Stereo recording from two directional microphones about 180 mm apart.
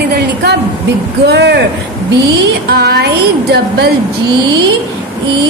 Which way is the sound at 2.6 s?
60° right (ahead or behind).